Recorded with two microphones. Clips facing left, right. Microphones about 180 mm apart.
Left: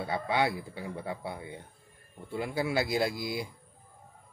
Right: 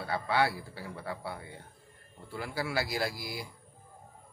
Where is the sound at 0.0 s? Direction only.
20° left (ahead or behind).